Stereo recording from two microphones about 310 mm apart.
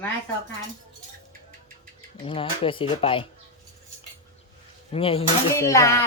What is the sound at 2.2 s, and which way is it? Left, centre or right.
Speech, centre.